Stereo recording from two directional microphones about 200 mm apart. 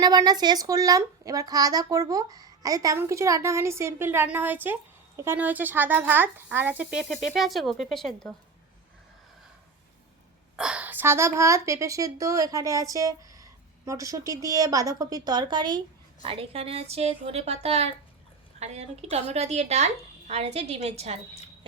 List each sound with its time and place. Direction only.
0.0 s speech: 20° right (ahead or behind); by 8.4 s centre (ahead or behind)
10.6 s a woman's voice: 5° right (ahead or behind); by 21.2 s 30° right (ahead or behind)